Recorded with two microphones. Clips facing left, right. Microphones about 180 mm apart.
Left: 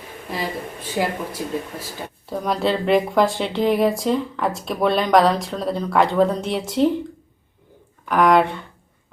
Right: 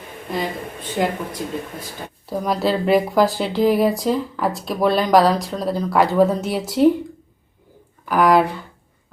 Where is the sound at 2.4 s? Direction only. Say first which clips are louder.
Right 1 dB; centre (ahead or behind).